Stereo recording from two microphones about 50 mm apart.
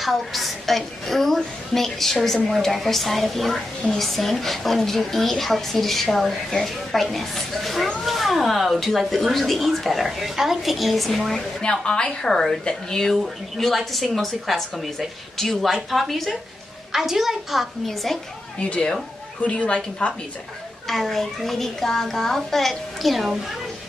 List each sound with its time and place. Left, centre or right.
0.0 s a woman's voice: centre
11.8 s a woman's voice: centre
16.9 s a woman's voice: centre
17.8 s a woman's voice: centre
18.6 s a woman's voice: left
20.8 s a woman's voice: centre